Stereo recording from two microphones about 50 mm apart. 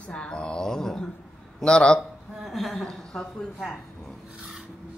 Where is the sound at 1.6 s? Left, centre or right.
Centre.